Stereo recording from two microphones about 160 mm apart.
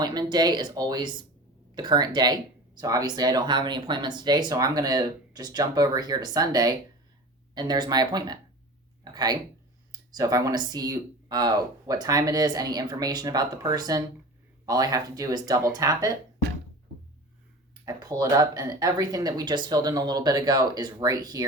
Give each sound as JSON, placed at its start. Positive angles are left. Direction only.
{"t": 0.0, "sound": "speech", "side_deg": -25}
{"t": 17.8, "sound": "speech", "side_deg": -25}